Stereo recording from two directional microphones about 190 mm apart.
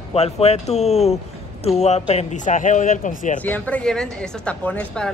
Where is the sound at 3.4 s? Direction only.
10° left (ahead or behind).